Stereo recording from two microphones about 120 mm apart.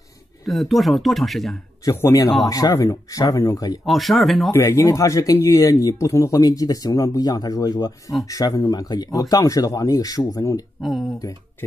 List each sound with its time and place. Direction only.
0.5 s speech: centre (ahead or behind)
1.9 s speech: 25° left (ahead or behind)
3.8 s speech: centre (ahead or behind)
4.5 s speech: 25° left (ahead or behind)
10.8 s speech: centre (ahead or behind)